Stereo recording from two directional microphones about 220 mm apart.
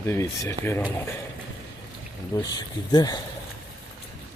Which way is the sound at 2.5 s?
20° left (ahead or behind).